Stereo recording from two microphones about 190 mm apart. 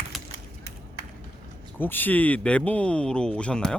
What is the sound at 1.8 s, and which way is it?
Speech, 10° left (ahead or behind).